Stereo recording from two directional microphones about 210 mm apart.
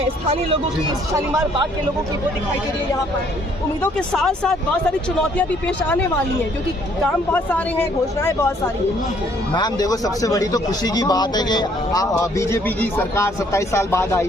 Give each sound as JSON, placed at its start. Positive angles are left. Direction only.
{"t": 4.1, "sound": "speech", "side_deg": 5}
{"t": 7.3, "sound": "speech", "side_deg": 10}